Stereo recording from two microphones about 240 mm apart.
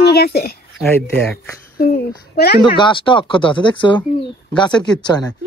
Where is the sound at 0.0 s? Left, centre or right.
Left.